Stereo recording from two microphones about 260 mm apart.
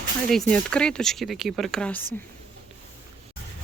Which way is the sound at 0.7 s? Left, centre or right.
Centre.